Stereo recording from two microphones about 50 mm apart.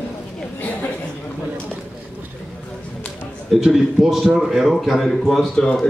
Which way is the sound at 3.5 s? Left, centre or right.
Centre.